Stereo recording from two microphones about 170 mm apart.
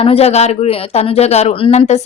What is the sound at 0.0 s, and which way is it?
Speech, 35° left (ahead or behind).